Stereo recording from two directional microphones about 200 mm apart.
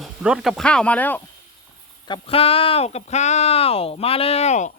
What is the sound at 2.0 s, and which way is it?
Speech, 25° left (ahead or behind).